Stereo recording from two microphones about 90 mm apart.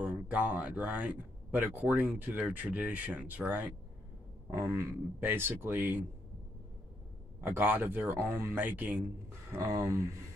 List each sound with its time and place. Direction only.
0.0 s speech: 15° right (ahead or behind)
1.9 s speech: 10° right (ahead or behind)
2.1 s speech: 20° right (ahead or behind)
4.7 s speech: 25° right (ahead or behind)
7.3 s speech: 20° right (ahead or behind)
9.5 s speech: 30° right (ahead or behind)